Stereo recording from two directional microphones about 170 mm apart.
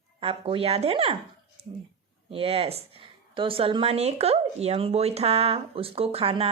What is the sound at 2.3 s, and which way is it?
Speech, 35° right (ahead or behind).